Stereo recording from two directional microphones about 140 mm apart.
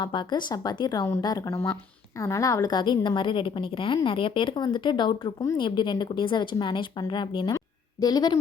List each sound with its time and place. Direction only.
0.0 s a woman's voice: 35° left (ahead or behind)